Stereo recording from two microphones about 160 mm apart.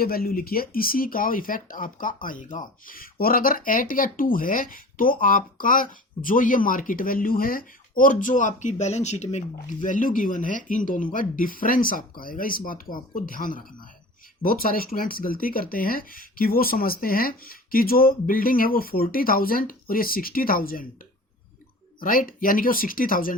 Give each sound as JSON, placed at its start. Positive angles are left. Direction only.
{"t": 0.0, "sound": "speech", "side_deg": 70}
{"t": 22.0, "sound": "speech", "side_deg": 60}